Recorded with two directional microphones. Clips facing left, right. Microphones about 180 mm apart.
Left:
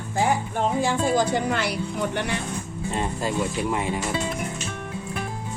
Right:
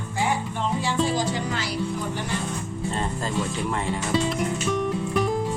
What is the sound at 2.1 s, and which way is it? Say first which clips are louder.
Speech: left 2 dB; 65° left (ahead or behind).